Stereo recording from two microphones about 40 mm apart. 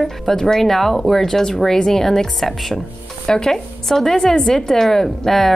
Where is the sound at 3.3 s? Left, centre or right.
Centre.